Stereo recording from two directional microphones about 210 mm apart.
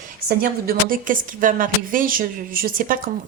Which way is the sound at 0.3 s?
45° right (ahead or behind).